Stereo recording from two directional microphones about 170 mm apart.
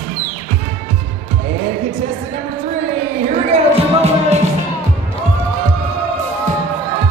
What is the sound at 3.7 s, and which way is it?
Music, 40° right (ahead or behind).